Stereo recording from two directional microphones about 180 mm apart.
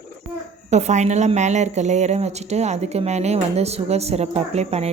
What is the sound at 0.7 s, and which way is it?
A woman's voice, 40° right (ahead or behind).